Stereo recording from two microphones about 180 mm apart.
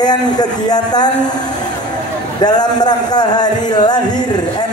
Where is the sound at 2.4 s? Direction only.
20° left (ahead or behind).